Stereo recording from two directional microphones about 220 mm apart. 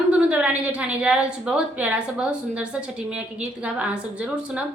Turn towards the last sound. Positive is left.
turn(degrees=-5)  # may be behind; listen again after turning